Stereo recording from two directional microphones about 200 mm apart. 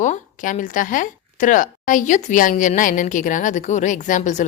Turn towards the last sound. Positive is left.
turn(degrees=40)  # may be behind; listen again after turning